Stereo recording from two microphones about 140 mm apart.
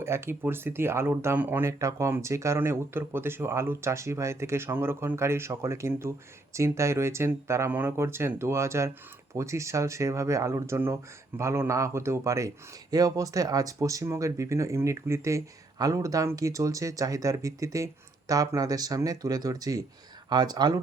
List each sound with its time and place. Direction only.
0.0 s speech: 20° right (ahead or behind)